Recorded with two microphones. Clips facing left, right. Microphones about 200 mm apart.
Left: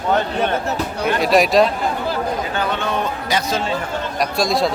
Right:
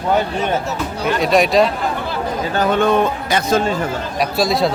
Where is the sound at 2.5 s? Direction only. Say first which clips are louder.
Right 7 dB; 45° right (ahead or behind).